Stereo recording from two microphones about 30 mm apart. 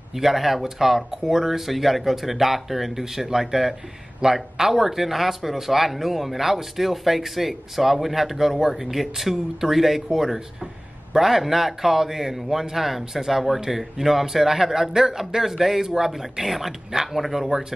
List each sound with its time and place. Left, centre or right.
0.1 s speech: centre